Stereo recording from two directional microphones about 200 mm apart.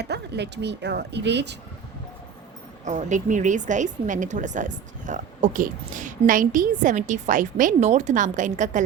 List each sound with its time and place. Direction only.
0.0 s speech: 55° right (ahead or behind)
2.8 s a woman's voice: 35° right (ahead or behind)